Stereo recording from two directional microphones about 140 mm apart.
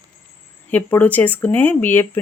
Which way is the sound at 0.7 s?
10° left (ahead or behind).